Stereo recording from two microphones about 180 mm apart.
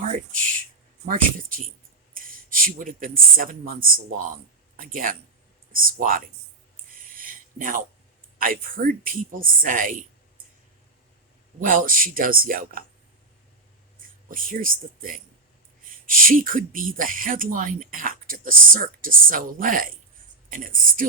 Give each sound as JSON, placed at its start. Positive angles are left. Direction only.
{"t": 1.0, "sound": "speech", "side_deg": -50}
{"t": 7.2, "sound": "a sound", "side_deg": -50}
{"t": 8.4, "sound": "speech", "side_deg": -50}
{"t": 11.6, "sound": "speech", "side_deg": -50}
{"t": 14.3, "sound": "speech", "side_deg": -50}
{"t": 16.2, "sound": "speech", "side_deg": -50}